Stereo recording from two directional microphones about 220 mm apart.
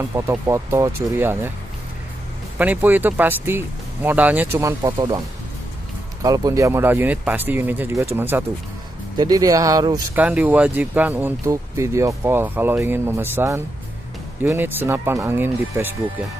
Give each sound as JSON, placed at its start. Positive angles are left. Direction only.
{"t": 0.1, "sound": "speech", "side_deg": -10}
{"t": 2.6, "sound": "speech", "side_deg": -10}
{"t": 6.2, "sound": "speech", "side_deg": -15}
{"t": 10.2, "sound": "speech", "side_deg": -5}